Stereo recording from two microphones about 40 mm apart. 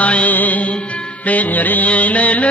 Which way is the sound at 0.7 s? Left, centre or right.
Left.